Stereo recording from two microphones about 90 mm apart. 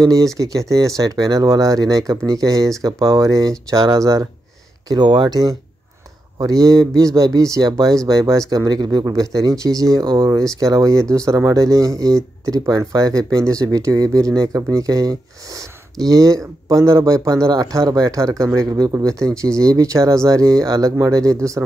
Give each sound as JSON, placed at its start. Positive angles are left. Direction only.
{"t": 0.0, "sound": "speech", "side_deg": -40}
{"t": 4.8, "sound": "speech", "side_deg": -55}
{"t": 18.7, "sound": "speech", "side_deg": -50}
{"t": 18.9, "sound": "speech", "side_deg": -35}